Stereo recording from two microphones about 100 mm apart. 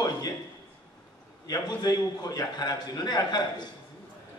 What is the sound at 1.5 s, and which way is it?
A man's voice, 40° left (ahead or behind).